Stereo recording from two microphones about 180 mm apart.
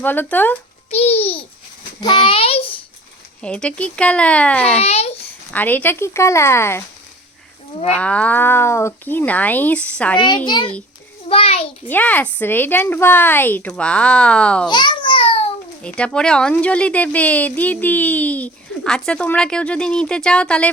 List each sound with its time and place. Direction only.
0.0 s speech: 10° left (ahead or behind)
0.9 s a child's voice: 35° left (ahead or behind)
3.4 s speech: 5° left (ahead or behind)
4.8 s a child's voice: 35° left (ahead or behind)
5.5 s speech: 10° left (ahead or behind)
7.9 s speech: 5° left (ahead or behind)
10.2 s a child's voice: 25° left (ahead or behind)
11.3 s a sound: 35° left (ahead or behind)
11.9 s speech: 10° left (ahead or behind)
14.7 s babbling: 25° left (ahead or behind)
15.8 s speech: 5° left (ahead or behind)